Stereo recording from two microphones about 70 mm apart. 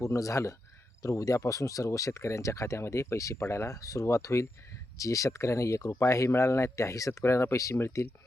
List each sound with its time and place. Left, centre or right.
0.0 s speech: left